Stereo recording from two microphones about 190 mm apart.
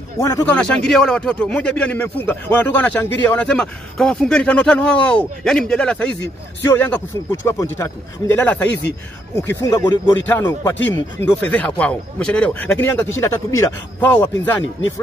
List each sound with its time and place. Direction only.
0.2 s a man's voice: 15° left (ahead or behind)